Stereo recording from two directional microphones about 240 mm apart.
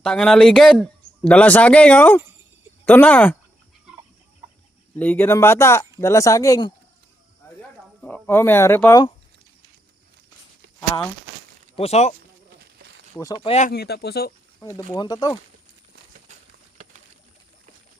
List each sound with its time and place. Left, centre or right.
0.0 s a man's voice: centre
4.9 s speech: centre
8.0 s speech: centre
11.8 s speech: left
13.1 s speech: centre
13.7 s speech: left
14.6 s speech: centre
16.3 s a sound: right